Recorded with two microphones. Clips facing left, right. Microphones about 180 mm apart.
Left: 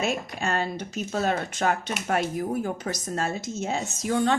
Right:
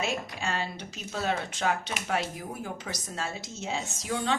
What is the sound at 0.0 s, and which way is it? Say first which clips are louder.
A woman's voice: left 4 dB; 50° left (ahead or behind).